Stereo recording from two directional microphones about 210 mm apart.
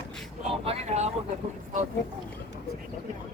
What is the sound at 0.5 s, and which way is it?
Vehicle, 30° right (ahead or behind).